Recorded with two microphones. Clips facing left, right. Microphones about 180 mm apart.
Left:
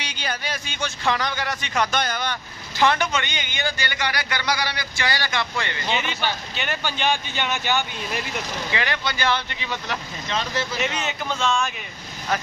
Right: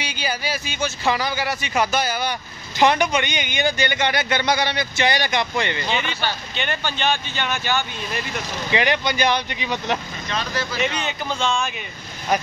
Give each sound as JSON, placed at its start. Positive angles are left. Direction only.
{"t": 0.0, "sound": "a man's voice", "side_deg": -5}
{"t": 5.9, "sound": "a man's voice", "side_deg": 5}
{"t": 8.7, "sound": "speech", "side_deg": -20}
{"t": 10.8, "sound": "a man's voice", "side_deg": 0}